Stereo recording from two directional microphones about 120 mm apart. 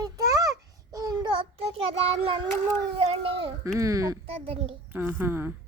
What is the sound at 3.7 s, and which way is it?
Speech, 25° right (ahead or behind).